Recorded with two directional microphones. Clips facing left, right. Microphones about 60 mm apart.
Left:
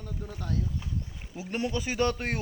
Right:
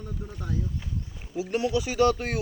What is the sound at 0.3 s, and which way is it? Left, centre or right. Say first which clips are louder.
Speech: even; centre.